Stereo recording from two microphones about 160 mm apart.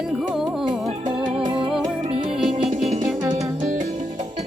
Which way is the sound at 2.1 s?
40° right (ahead or behind).